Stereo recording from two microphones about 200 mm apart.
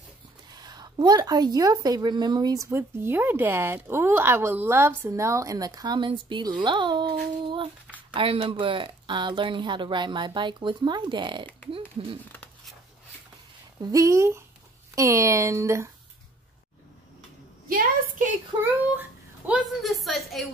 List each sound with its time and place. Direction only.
0.6 s a woman's voice: 20° right (ahead or behind)
13.8 s a woman's voice: 15° right (ahead or behind)
17.6 s a woman's voice: 45° right (ahead or behind)
18.6 s a woman's voice: 10° right (ahead or behind)